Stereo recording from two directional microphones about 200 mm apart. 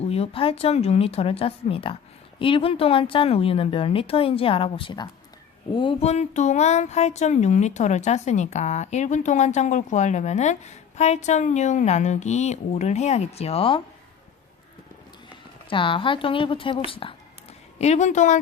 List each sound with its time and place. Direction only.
0.0 s a woman's voice: 30° left (ahead or behind)
15.7 s a woman's voice: 25° left (ahead or behind)